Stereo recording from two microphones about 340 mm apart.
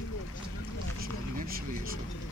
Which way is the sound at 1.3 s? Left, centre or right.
Right.